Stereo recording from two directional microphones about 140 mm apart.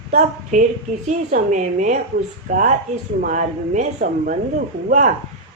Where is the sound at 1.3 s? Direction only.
60° right (ahead or behind).